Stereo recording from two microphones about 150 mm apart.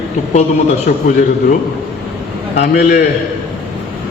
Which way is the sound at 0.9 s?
55° left (ahead or behind).